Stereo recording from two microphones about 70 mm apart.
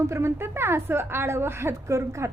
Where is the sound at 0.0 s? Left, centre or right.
Right.